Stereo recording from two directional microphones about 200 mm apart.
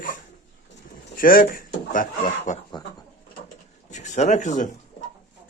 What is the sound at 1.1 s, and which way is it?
Speech, 45° left (ahead or behind).